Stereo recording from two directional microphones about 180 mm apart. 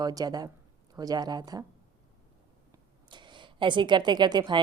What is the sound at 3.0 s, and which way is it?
Speech, 25° right (ahead or behind).